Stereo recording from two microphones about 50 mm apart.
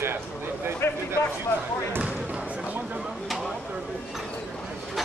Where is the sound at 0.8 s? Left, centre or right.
Left.